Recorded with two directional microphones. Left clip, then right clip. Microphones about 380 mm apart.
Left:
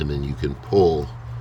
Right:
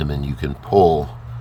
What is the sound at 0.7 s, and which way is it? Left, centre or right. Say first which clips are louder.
Speech: right 4 dB; right.